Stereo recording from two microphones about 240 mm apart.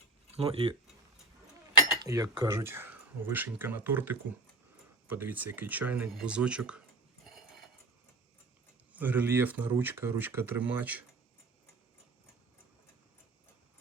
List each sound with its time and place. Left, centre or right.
0.3 s speech: right
2.0 s speech: centre
8.9 s speech: centre